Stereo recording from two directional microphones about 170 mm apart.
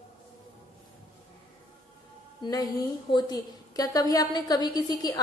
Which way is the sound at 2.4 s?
20° left (ahead or behind).